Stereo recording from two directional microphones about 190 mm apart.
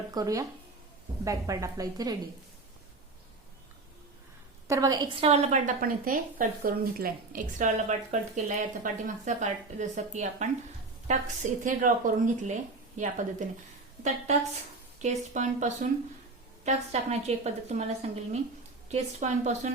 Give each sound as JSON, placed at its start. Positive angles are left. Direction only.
{"t": 0.1, "sound": "a woman's voice", "side_deg": -20}
{"t": 4.7, "sound": "a woman's voice", "side_deg": -20}
{"t": 11.6, "sound": "a woman's voice", "side_deg": -45}